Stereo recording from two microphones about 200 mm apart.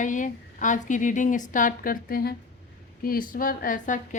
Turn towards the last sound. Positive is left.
turn(degrees=40)  # may be behind; listen again after turning